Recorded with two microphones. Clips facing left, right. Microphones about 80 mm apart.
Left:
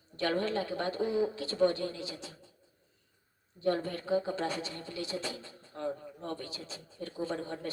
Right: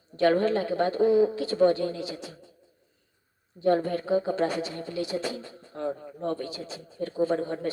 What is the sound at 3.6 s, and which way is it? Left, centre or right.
Speech, right.